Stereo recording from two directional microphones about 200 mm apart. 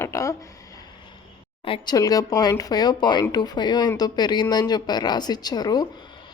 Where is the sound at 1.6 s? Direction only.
25° left (ahead or behind).